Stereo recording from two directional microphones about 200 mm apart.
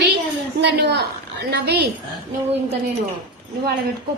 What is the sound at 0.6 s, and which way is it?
A woman's voice, 55° right (ahead or behind).